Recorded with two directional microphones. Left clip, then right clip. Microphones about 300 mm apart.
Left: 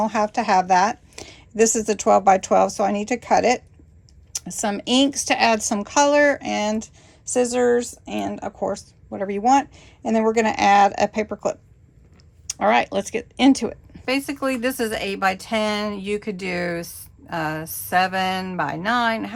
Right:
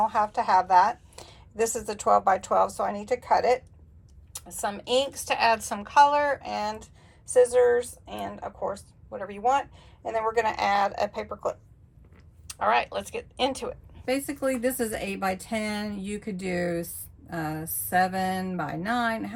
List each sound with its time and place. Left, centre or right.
0.0 s a woman's voice: left
14.0 s a woman's voice: centre